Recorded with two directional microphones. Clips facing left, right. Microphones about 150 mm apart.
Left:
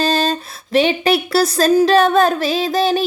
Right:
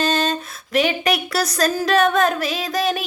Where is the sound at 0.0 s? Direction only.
35° left (ahead or behind).